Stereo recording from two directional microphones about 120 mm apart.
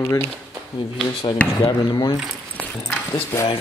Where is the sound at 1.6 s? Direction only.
30° left (ahead or behind).